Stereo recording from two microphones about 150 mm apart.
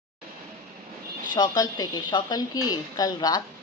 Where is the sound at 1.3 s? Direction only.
25° left (ahead or behind).